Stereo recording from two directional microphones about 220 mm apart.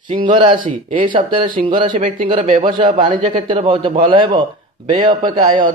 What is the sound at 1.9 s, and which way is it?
Speech, 35° right (ahead or behind).